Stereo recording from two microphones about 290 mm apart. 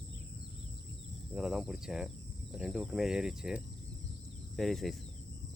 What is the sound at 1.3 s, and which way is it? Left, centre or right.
Speech, centre.